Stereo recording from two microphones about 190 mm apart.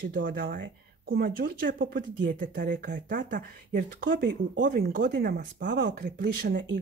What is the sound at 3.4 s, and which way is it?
Speech, 50° right (ahead or behind).